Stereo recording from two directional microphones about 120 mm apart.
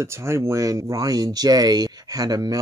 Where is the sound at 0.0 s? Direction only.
25° right (ahead or behind).